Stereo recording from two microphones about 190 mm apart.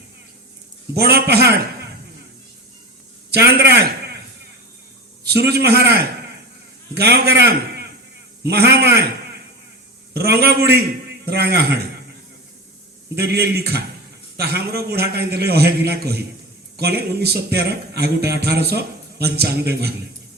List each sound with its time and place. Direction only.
0.9 s speech: 60° right (ahead or behind)
3.3 s a sound: 60° right (ahead or behind)
5.2 s a man's voice: 60° right (ahead or behind)
10.2 s speech: 55° right (ahead or behind)
13.1 s speech: 60° right (ahead or behind)